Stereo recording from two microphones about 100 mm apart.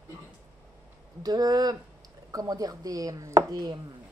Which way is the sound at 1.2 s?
40° right (ahead or behind).